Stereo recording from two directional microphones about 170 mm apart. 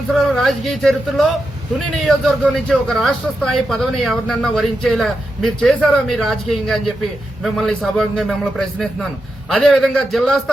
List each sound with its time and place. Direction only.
0.1 s a man's voice: centre (ahead or behind)